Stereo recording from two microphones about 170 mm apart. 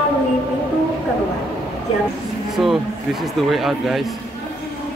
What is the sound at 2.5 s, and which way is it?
Speech, centre (ahead or behind).